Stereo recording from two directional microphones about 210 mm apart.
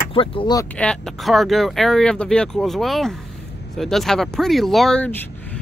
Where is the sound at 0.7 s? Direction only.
5° left (ahead or behind).